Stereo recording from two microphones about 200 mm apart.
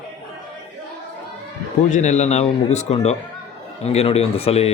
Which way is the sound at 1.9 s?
35° left (ahead or behind).